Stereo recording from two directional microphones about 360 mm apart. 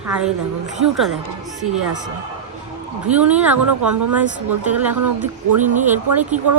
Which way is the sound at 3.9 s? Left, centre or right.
Right.